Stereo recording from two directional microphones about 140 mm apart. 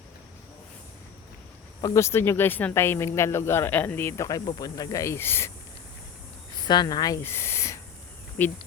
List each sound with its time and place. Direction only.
1.8 s speech: 20° left (ahead or behind)
6.7 s speech: 30° left (ahead or behind)
7.2 s speech: 15° left (ahead or behind)